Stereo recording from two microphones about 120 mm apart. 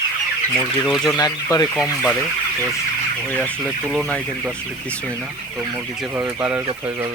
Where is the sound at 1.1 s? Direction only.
35° left (ahead or behind).